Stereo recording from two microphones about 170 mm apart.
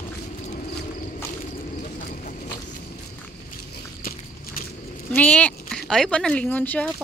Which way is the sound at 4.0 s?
55° left (ahead or behind).